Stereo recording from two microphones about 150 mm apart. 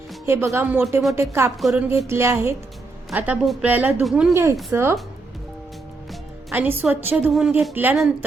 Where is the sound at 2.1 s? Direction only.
20° right (ahead or behind).